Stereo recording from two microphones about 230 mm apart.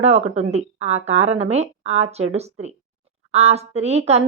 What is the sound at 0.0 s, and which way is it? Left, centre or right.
A woman's voice, right.